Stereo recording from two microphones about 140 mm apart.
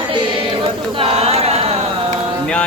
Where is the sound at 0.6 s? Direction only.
40° right (ahead or behind).